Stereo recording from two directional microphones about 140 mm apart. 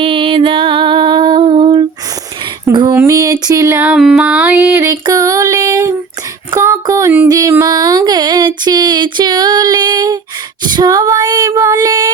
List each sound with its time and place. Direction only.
0.0 s music: 40° right (ahead or behind)
2.7 s a sound: 25° right (ahead or behind)
10.7 s female singing: 30° right (ahead or behind)